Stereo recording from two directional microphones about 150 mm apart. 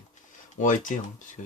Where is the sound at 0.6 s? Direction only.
55° left (ahead or behind).